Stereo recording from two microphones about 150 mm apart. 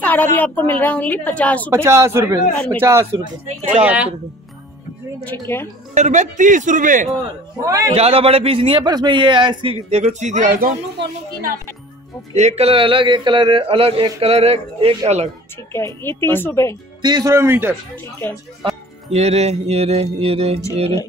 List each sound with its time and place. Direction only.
0.0 s a woman's voice: 10° left (ahead or behind)
1.7 s speech: 15° right (ahead or behind)
2.5 s a woman's voice: 5° left (ahead or behind)
2.8 s speech: 15° right (ahead or behind)
5.5 s a woman's voice: 15° left (ahead or behind)
5.9 s a man's voice: 50° right (ahead or behind)
7.6 s speech: 20° right (ahead or behind)
7.9 s a man's voice: 40° right (ahead or behind)
9.8 s speech: 45° right (ahead or behind); by 10.7 s 65° right (ahead or behind)
12.4 s a man's voice: 45° right (ahead or behind)
15.7 s a woman's voice: 15° left (ahead or behind)
17.0 s speech: 25° right (ahead or behind)
19.1 s speech: 45° right (ahead or behind)